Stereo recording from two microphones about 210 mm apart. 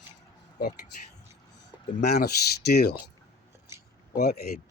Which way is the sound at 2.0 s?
50° left (ahead or behind).